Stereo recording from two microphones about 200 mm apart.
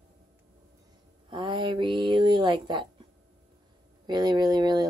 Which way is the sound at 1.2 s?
25° right (ahead or behind).